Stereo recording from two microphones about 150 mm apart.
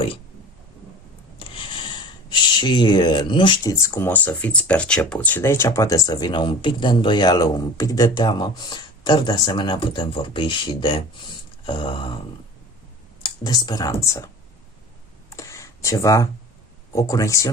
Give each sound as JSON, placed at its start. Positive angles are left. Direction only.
{"t": 1.4, "sound": "speech", "side_deg": 35}
{"t": 13.2, "sound": "speech", "side_deg": 25}
{"t": 15.3, "sound": "a sound", "side_deg": 20}
{"t": 16.9, "sound": "speech", "side_deg": 20}